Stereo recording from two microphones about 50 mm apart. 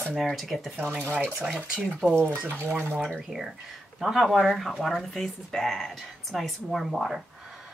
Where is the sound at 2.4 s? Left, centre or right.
Right.